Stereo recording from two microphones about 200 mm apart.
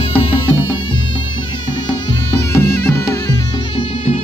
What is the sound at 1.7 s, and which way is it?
Music, 15° left (ahead or behind).